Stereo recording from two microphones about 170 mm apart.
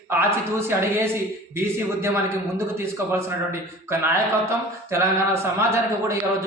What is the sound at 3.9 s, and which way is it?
Speech, 15° right (ahead or behind).